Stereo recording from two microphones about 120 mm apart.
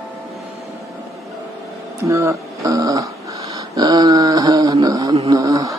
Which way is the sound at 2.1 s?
25° right (ahead or behind).